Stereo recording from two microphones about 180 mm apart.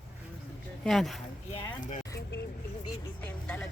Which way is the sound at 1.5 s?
45° left (ahead or behind).